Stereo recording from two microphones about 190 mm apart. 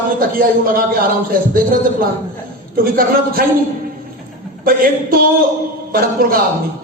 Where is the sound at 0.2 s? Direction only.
50° right (ahead or behind).